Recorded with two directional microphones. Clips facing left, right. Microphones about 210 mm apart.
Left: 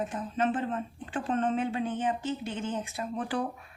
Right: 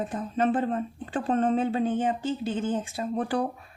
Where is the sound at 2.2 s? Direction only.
90° right.